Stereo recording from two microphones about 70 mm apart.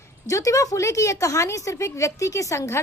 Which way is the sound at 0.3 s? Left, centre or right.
Left.